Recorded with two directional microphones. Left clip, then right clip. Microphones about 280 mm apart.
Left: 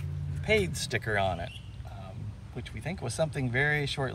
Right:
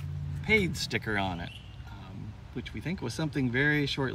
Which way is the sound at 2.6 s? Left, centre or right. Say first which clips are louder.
Right 1 dB; left.